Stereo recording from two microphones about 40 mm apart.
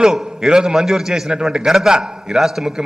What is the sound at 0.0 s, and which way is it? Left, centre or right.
A man's voice, centre.